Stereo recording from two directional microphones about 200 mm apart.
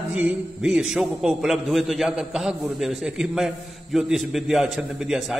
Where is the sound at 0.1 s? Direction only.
5° right (ahead or behind).